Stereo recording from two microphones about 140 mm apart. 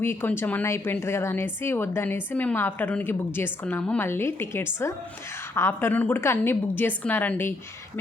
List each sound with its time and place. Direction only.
0.0 s speech: 15° left (ahead or behind)